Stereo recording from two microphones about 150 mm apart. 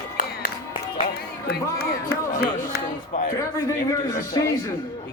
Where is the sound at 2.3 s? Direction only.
75° left (ahead or behind); by 3.3 s 60° left (ahead or behind).